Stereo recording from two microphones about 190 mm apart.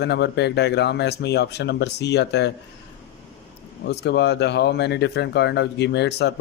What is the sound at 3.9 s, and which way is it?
Speech, 60° left (ahead or behind).